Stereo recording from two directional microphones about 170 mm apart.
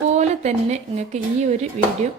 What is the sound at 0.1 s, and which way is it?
A woman's voice, 40° right (ahead or behind).